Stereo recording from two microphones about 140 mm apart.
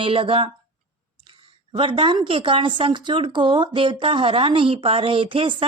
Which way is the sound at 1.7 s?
40° right (ahead or behind).